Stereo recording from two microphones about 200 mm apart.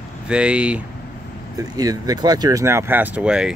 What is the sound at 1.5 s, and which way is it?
Speech, 20° right (ahead or behind).